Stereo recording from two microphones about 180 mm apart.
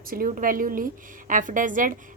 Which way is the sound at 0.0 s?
55° right (ahead or behind).